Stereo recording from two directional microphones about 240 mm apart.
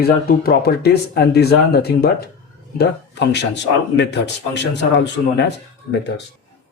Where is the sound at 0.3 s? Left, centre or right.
Left.